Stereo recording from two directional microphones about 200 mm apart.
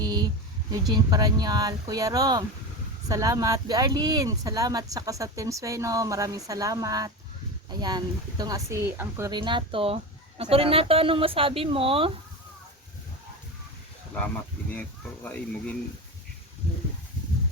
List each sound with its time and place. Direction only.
0.0 s a sound: 20° right (ahead or behind)
0.7 s speech: 20° right (ahead or behind)
14.7 s speech: 10° left (ahead or behind)